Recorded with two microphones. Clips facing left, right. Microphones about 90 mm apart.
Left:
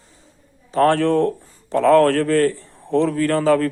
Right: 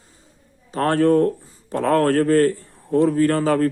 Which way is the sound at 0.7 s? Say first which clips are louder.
Left 1 dB; 35° right (ahead or behind).